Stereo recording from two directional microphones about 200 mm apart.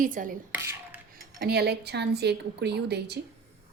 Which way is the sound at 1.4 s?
55° right (ahead or behind).